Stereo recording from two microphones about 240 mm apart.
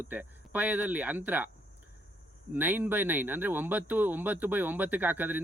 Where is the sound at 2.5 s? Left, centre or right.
Centre.